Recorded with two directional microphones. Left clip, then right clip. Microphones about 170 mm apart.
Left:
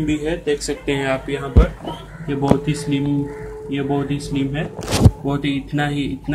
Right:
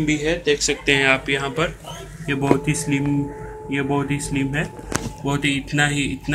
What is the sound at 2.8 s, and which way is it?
Speech, 20° left (ahead or behind).